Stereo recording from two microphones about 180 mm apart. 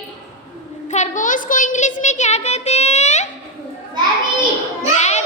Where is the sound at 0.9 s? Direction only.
40° left (ahead or behind).